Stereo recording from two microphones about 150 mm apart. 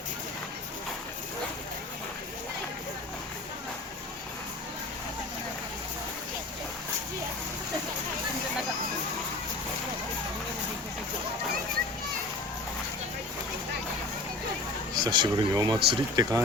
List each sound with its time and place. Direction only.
14.9 s speech: 30° right (ahead or behind)